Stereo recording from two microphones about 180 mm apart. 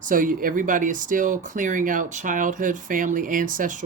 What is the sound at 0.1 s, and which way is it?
Speech, 50° right (ahead or behind).